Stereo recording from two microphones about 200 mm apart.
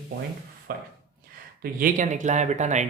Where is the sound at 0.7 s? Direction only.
50° right (ahead or behind).